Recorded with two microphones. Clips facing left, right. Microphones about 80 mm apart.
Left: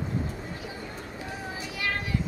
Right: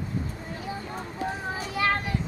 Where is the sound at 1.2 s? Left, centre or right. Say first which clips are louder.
Right 6 dB; right.